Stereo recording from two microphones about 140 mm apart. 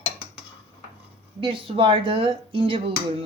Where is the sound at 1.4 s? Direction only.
40° right (ahead or behind).